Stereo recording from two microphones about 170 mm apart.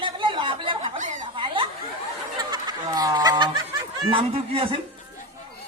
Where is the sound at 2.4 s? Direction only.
25° right (ahead or behind).